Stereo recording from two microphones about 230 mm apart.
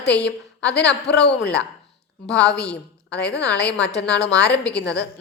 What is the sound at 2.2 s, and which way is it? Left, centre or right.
Speech, centre.